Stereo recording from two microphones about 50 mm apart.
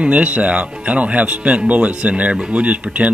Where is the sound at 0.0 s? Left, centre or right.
Right.